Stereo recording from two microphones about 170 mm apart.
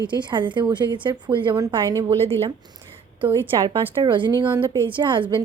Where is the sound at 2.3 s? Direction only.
35° right (ahead or behind).